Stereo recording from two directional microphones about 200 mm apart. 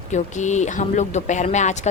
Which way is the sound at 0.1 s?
35° left (ahead or behind).